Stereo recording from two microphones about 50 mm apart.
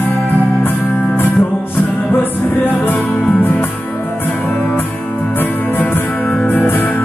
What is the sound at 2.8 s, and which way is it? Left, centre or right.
Music, left.